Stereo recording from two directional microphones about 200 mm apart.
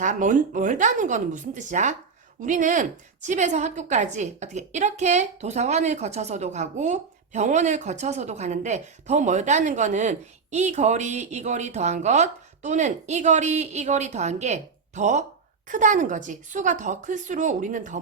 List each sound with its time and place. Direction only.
0.0 s a woman's voice: 40° right (ahead or behind)